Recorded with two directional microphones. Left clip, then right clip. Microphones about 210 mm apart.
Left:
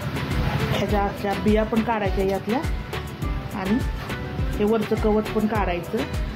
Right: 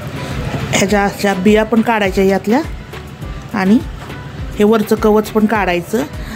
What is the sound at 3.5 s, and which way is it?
Speech, 55° right (ahead or behind).